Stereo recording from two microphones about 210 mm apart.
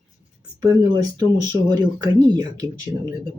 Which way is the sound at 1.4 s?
20° right (ahead or behind).